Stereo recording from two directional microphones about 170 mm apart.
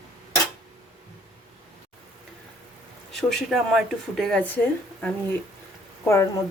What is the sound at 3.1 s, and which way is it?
Speech, centre (ahead or behind).